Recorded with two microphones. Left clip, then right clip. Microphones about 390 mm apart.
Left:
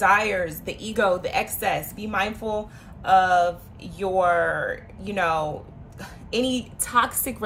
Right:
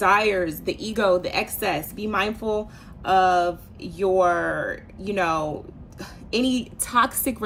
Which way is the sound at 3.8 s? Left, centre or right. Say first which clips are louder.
Right 4 dB; left.